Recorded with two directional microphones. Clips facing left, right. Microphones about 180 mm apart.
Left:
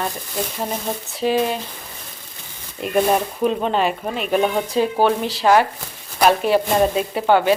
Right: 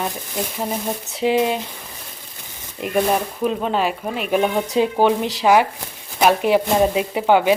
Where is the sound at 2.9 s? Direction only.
5° left (ahead or behind).